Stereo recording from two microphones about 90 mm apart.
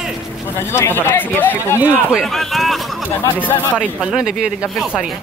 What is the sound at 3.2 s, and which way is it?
Speech, 20° left (ahead or behind).